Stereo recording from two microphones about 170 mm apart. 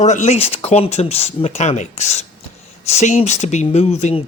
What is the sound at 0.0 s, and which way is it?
Speech, 45° left (ahead or behind).